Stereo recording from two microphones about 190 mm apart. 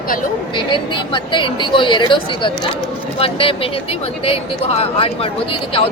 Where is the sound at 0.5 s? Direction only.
25° left (ahead or behind).